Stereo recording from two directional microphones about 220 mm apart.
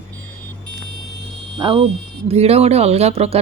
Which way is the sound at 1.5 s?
20° right (ahead or behind).